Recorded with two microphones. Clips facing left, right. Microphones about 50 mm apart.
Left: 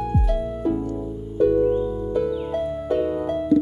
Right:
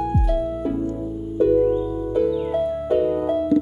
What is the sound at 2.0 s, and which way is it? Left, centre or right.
Music, centre.